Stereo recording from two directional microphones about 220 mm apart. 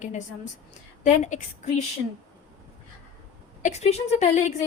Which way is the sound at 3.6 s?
30° left (ahead or behind).